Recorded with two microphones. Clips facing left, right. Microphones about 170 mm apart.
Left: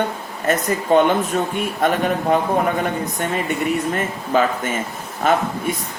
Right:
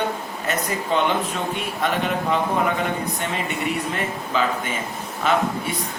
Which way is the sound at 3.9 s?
45° left (ahead or behind).